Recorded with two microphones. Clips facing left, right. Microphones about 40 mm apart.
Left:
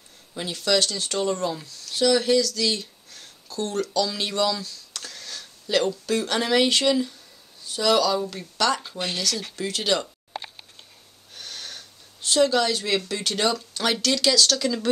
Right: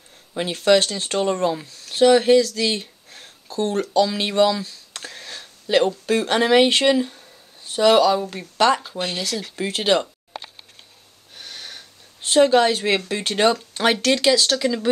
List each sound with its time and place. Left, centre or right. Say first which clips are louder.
0.3 s speech: right 7 dB; right
11.3 s wheeze: right 1 dB; centre
12.2 s speech: right 5 dB; right